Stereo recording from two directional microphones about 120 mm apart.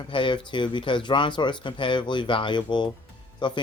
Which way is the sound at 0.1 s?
45° left (ahead or behind).